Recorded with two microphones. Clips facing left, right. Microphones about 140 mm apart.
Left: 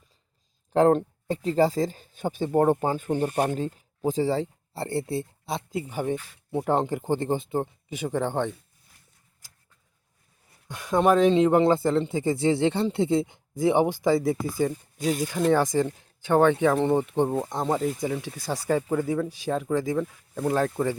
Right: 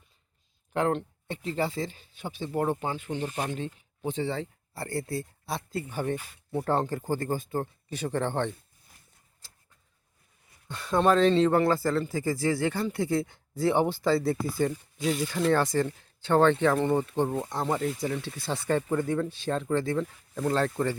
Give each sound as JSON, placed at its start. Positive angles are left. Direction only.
{"t": 0.7, "sound": "speech", "side_deg": 35}
{"t": 10.7, "sound": "speech", "side_deg": 15}